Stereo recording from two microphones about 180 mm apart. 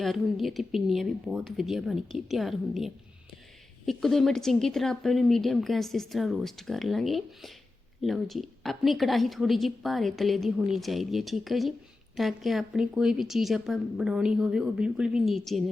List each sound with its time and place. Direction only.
0.0 s a woman's voice: centre (ahead or behind)